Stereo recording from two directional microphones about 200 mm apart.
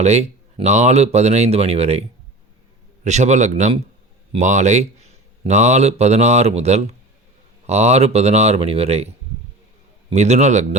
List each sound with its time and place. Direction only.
0.0 s speech: 35° right (ahead or behind)
10.1 s speech: 35° right (ahead or behind)